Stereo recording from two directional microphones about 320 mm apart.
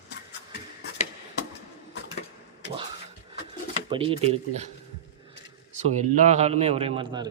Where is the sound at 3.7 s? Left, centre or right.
Centre.